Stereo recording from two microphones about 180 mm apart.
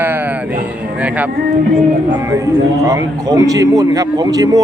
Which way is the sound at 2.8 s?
15° right (ahead or behind).